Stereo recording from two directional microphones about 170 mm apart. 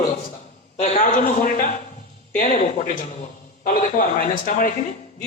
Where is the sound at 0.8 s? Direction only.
50° left (ahead or behind).